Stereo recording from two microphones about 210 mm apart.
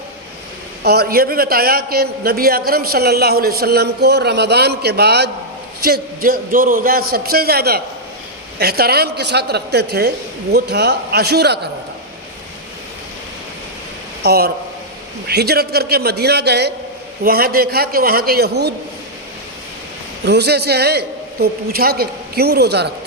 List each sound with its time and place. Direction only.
0.9 s a man's voice: 45° right (ahead or behind)
14.2 s a man's voice: 50° right (ahead or behind)
20.2 s a man's voice: 50° right (ahead or behind)